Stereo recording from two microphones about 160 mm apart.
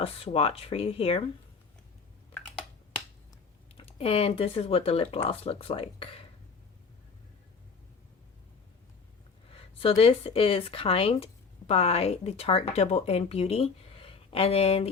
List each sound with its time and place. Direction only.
0.0 s speech: 40° left (ahead or behind)
3.8 s speech: 35° left (ahead or behind)
9.5 s speech: 35° left (ahead or behind)